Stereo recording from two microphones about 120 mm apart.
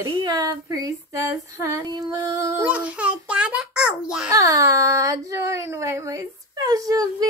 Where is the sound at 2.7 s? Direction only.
10° right (ahead or behind).